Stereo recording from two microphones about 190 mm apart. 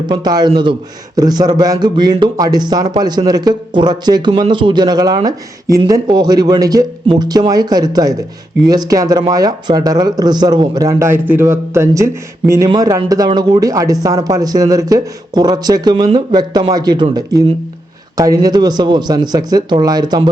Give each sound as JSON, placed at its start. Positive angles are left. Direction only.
{"t": 0.1, "sound": "a man's voice", "side_deg": -20}